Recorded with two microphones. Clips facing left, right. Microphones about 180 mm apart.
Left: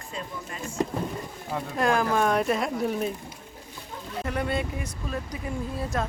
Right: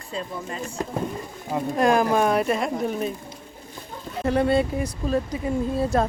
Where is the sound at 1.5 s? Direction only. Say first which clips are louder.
Right 5 dB; 20° right (ahead or behind); by 3.1 s centre (ahead or behind).